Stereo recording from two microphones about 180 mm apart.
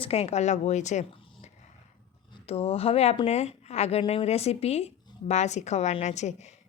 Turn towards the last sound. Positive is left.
turn(degrees=40)  # may be behind; listen again after turning